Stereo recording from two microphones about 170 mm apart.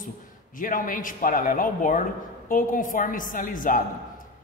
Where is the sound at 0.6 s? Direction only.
50° left (ahead or behind).